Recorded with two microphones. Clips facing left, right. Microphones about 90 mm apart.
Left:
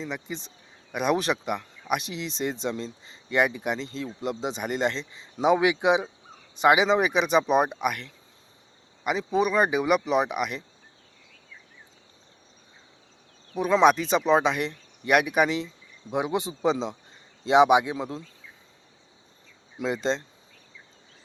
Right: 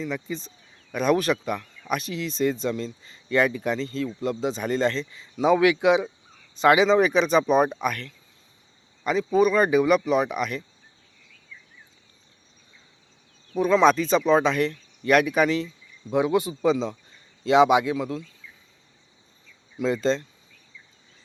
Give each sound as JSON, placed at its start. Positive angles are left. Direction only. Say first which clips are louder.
{"t": 0.0, "sound": "speech", "louder": "right 4 dB", "side_deg": 20}
{"t": 13.6, "sound": "speech", "louder": "right 1 dB", "side_deg": 15}
{"t": 19.7, "sound": "speech", "louder": "right 4 dB", "side_deg": 20}